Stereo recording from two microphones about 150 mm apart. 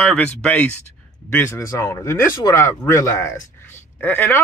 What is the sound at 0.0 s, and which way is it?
Speech, 5° left (ahead or behind).